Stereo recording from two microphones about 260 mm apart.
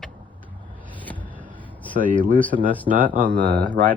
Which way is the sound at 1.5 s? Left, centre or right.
Centre.